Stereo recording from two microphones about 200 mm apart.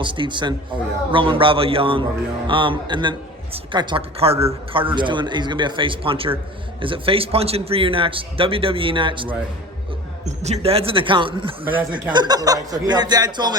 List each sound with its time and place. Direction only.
0.0 s speech: 25° right (ahead or behind)